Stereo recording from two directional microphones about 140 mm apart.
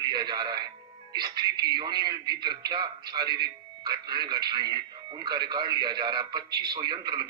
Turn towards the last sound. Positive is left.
turn(degrees=-30)  # may be behind; listen again after turning